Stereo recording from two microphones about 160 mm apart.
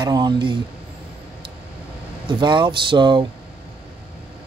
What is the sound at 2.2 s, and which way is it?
Speech, 30° right (ahead or behind).